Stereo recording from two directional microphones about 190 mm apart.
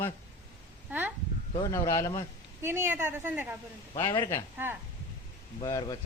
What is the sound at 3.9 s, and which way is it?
Speech, 20° left (ahead or behind).